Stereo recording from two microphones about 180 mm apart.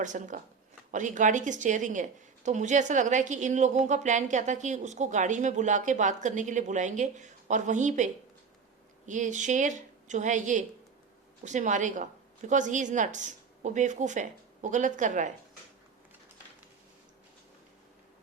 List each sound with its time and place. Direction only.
0.0 s a woman's voice: 45° right (ahead or behind)